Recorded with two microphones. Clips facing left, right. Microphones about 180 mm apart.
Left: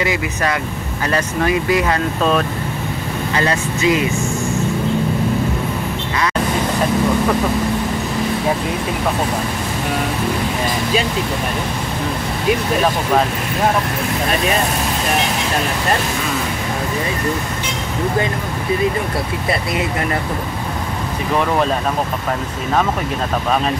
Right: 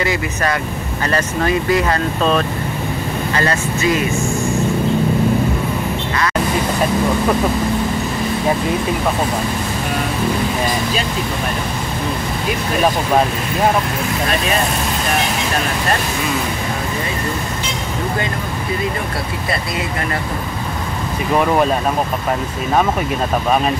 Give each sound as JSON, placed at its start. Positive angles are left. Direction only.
{"t": 1.0, "sound": "speech", "side_deg": 10}